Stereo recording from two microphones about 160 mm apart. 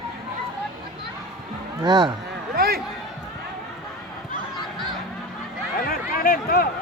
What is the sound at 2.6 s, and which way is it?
Speech, 70° right (ahead or behind).